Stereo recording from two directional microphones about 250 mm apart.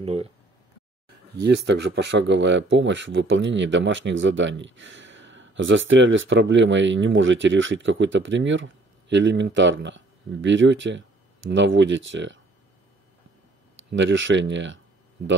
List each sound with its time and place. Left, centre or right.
0.0 s speech: right
1.3 s speech: right
13.8 s speech: right